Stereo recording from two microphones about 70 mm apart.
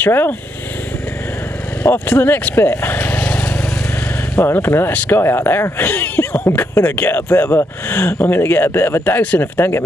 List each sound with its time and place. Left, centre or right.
0.0 s speech: left
1.8 s speech: left